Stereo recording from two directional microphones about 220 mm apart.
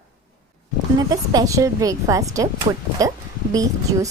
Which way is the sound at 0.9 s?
15° right (ahead or behind).